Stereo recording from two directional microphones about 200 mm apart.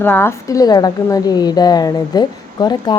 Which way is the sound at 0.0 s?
10° left (ahead or behind).